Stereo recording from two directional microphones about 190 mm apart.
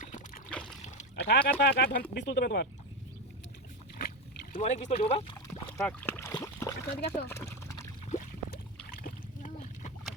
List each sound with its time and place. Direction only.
0.0 s a sound: 40° left (ahead or behind)
0.5 s splash: 5° left (ahead or behind)
1.1 s speech: 60° left (ahead or behind)
4.5 s speech: 35° left (ahead or behind)
5.8 s a sound: 10° left (ahead or behind)
8.9 s splash: 45° left (ahead or behind)